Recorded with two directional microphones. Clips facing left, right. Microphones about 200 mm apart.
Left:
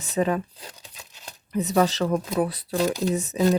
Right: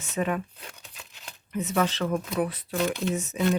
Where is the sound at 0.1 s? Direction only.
35° left (ahead or behind).